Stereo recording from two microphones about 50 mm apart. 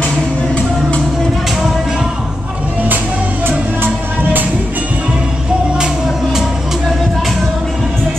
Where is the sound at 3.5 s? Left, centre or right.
Right.